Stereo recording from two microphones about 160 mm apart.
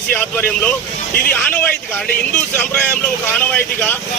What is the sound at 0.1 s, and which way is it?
Speech, 10° left (ahead or behind).